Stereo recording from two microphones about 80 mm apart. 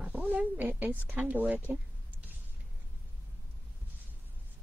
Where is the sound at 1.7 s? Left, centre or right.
Right.